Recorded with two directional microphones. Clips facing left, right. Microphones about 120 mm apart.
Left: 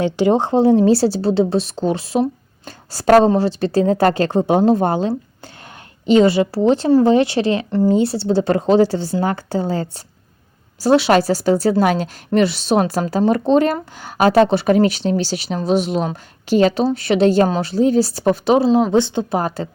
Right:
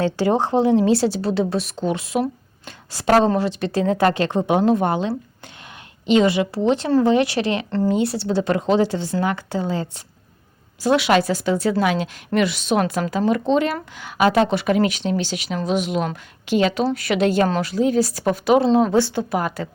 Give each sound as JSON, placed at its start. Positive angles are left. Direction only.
{"t": 0.0, "sound": "a woman's voice", "side_deg": 20}
{"t": 18.6, "sound": "speech", "side_deg": 5}
{"t": 18.9, "sound": "speech", "side_deg": 20}